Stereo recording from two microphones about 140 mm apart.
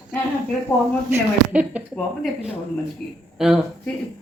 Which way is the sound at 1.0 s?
10° right (ahead or behind).